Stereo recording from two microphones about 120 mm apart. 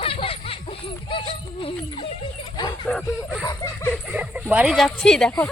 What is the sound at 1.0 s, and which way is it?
Speech, 45° left (ahead or behind).